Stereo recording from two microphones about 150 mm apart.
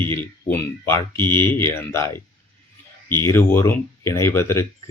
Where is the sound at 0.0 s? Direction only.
10° left (ahead or behind).